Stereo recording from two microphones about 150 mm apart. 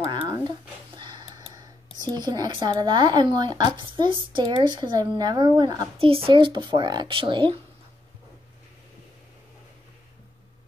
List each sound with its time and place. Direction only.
0.3 s speech: 30° right (ahead or behind)
5.9 s speech: 40° right (ahead or behind)